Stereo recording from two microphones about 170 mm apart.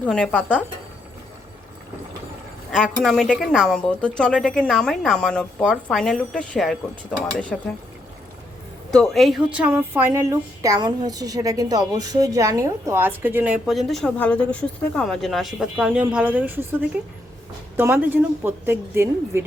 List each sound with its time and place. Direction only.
0.0 s speech: 5° left (ahead or behind)
2.7 s a woman's voice: centre (ahead or behind)
8.9 s a woman's voice: 5° left (ahead or behind); by 19.5 s 15° right (ahead or behind)